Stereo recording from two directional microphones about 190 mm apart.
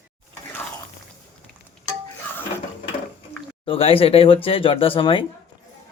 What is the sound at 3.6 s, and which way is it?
Speech, 30° left (ahead or behind).